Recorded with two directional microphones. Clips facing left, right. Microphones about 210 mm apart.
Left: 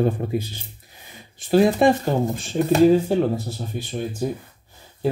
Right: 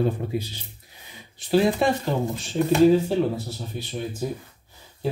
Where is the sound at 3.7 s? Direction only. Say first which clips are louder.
Left 3 dB; 50° left (ahead or behind).